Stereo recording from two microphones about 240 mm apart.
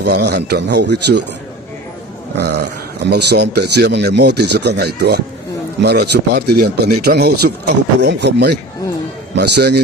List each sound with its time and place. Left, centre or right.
0.0 s speech: right
2.3 s speech: right